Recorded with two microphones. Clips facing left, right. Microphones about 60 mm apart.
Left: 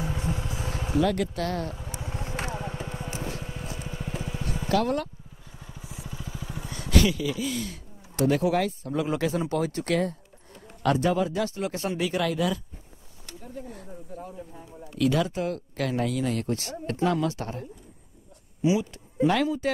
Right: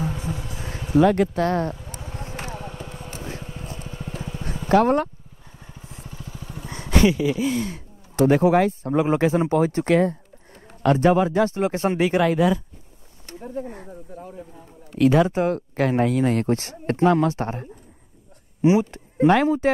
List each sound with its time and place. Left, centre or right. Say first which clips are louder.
0.1 s vehicle: right 1 dB; left
0.9 s speech: right 8 dB; right
1.8 s vehicle: even; left
3.4 s a sound: right 1 dB; centre
4.6 s speech: right 8 dB; right
5.6 s vehicle: even; centre
6.6 s speech: right 5 dB; right
13.3 s speech: right 8 dB; right